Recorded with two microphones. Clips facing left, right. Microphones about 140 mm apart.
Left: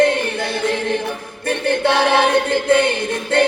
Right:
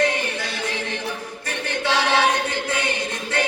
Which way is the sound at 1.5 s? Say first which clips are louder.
Left 7 dB; 55° left (ahead or behind).